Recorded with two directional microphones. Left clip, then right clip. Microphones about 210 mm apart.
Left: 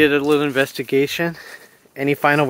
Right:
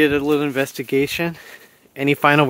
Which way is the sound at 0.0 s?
10° right (ahead or behind).